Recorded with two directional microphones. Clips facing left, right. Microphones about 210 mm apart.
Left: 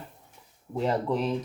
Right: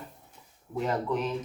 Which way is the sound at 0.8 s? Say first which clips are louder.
Left 2 dB; 30° left (ahead or behind).